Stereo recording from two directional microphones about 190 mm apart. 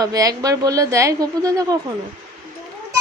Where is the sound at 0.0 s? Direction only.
20° right (ahead or behind).